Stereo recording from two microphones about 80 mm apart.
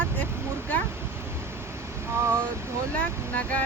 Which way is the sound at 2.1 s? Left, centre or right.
Right.